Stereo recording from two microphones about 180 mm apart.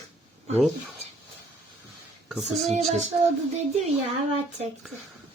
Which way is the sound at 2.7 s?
40° right (ahead or behind).